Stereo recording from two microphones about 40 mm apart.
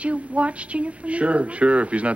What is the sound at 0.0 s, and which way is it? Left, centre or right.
Speech, right.